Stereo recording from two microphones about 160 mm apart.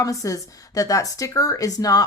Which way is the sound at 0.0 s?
20° left (ahead or behind).